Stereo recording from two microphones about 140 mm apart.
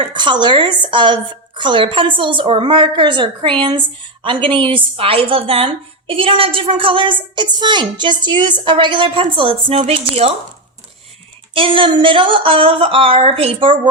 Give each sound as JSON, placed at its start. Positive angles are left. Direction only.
{"t": 0.0, "sound": "speech", "side_deg": -35}
{"t": 11.5, "sound": "speech", "side_deg": -40}